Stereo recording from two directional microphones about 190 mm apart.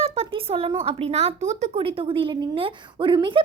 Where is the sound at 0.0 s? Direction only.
30° right (ahead or behind).